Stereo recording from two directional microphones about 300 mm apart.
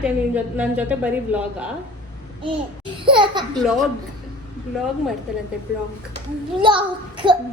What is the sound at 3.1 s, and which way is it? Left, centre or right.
Speech, centre.